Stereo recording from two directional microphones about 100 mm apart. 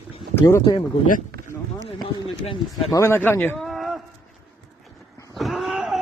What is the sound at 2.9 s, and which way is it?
Speech, 30° left (ahead or behind).